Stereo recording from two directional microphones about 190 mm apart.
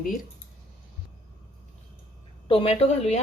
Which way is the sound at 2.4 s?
30° left (ahead or behind).